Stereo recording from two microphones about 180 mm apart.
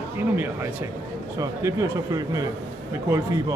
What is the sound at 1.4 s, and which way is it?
Speech, 20° right (ahead or behind).